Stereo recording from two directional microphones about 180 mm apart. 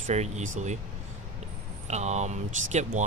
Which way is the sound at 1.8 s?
40° right (ahead or behind).